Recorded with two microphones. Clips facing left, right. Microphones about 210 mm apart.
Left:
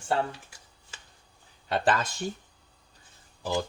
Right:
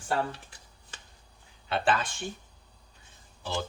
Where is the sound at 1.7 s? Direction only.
40° left (ahead or behind).